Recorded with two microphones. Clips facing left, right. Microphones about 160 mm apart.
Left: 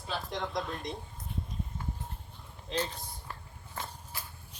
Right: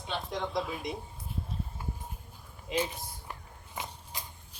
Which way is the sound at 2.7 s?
10° right (ahead or behind).